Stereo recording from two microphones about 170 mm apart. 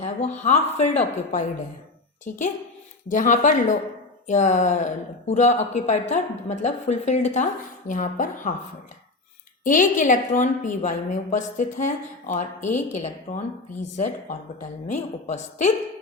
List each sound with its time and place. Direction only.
0.0 s a woman's voice: 40° left (ahead or behind)
9.6 s speech: 50° left (ahead or behind)